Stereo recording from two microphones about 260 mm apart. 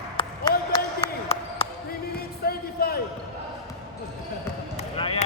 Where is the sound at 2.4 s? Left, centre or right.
Left.